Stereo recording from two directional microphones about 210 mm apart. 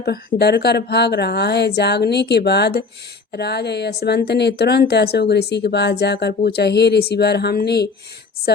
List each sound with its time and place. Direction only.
0.0 s speech: 45° left (ahead or behind)